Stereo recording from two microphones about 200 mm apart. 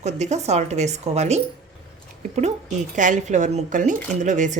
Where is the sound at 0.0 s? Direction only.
35° right (ahead or behind).